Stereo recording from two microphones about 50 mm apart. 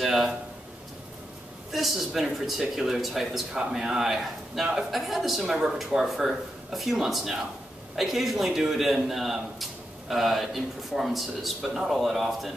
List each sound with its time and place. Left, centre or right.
0.0 s a sound: centre
1.7 s a man's voice: centre
5.4 s a man's voice: centre